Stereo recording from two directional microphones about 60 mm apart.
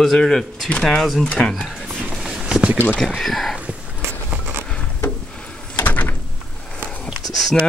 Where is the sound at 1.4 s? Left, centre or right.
Centre.